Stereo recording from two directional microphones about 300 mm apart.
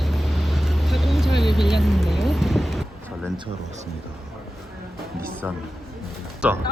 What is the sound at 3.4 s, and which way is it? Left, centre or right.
Speech, right.